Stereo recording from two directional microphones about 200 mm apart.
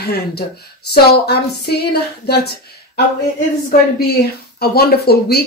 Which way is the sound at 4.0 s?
50° left (ahead or behind).